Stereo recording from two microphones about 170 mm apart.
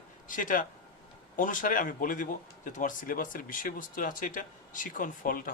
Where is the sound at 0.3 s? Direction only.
50° left (ahead or behind).